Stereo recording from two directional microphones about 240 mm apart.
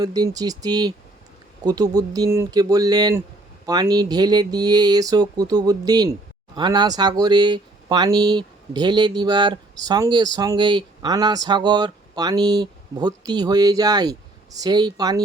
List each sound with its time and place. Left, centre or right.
0.0 s speech: centre